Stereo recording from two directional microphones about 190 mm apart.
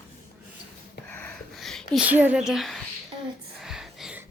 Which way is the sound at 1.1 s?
10° left (ahead or behind).